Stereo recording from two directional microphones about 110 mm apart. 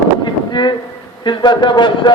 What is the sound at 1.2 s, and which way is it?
Speech, 45° left (ahead or behind).